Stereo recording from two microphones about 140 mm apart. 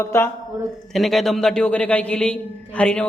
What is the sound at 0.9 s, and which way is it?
A man's voice, centre (ahead or behind).